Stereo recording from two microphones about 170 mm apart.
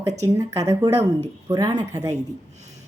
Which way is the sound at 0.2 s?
20° right (ahead or behind).